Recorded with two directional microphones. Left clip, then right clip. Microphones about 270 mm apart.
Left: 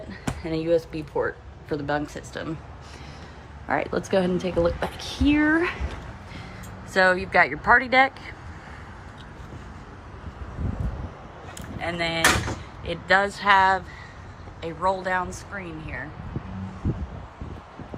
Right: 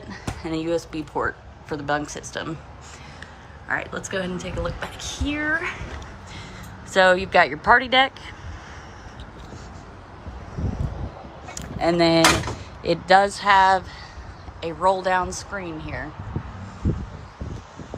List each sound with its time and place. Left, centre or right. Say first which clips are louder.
0.1 s speech: right 1 dB; centre
3.7 s speech: left 3 dB; centre
4.9 s speech: right 1 dB; centre
5.2 s speech: left 4 dB; centre
6.9 s speech: right 3 dB; centre
11.8 s speech: right 6 dB; centre